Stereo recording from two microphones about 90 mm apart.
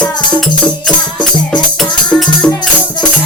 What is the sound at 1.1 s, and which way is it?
Music, 55° left (ahead or behind).